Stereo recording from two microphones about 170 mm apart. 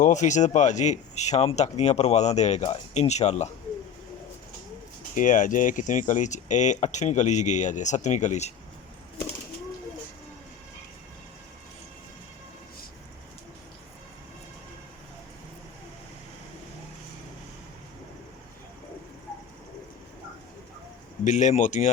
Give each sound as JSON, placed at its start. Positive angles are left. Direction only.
{"t": 0.0, "sound": "speech", "side_deg": 45}
{"t": 5.1, "sound": "speech", "side_deg": 50}
{"t": 21.2, "sound": "speech", "side_deg": 45}